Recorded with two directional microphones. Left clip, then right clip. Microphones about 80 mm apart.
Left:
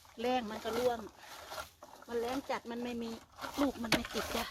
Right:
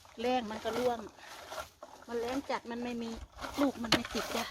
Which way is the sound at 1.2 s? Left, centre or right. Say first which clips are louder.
Right 2 dB; left.